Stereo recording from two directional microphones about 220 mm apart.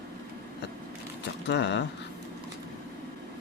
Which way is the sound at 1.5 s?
50° left (ahead or behind).